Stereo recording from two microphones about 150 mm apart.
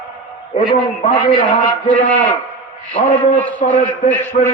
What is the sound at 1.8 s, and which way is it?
Speech, 55° left (ahead or behind).